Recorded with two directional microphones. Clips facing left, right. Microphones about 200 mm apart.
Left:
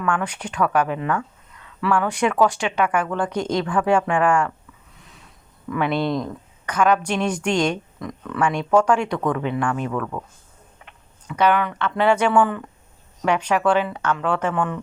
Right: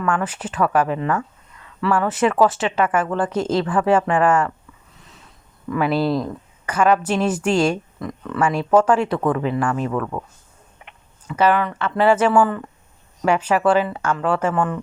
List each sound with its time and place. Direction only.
0.0 s speech: 5° right (ahead or behind)
5.7 s speech: 5° right (ahead or behind)
10.8 s a sound: 15° right (ahead or behind)
11.3 s speech: 5° right (ahead or behind)